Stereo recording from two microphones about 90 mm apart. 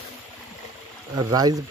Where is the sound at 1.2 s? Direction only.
45° right (ahead or behind).